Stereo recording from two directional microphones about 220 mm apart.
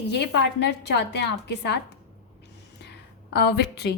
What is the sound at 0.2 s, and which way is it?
A woman's voice, 50° left (ahead or behind).